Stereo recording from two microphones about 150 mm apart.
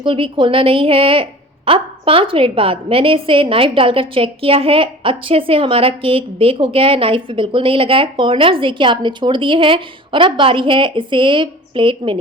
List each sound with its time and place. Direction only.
0.0 s a woman's voice: 35° right (ahead or behind)